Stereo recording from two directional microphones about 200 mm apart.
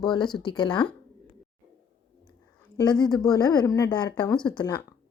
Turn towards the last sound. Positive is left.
turn(degrees=20)  # may be behind; listen again after turning